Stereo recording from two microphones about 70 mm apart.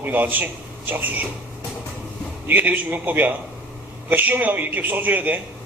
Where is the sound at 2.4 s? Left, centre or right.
Right.